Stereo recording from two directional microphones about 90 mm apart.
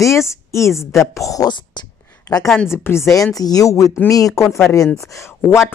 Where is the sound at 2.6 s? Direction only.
25° left (ahead or behind).